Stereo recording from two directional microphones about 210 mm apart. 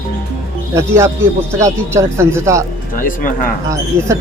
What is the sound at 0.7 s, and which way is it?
Speech, 15° right (ahead or behind).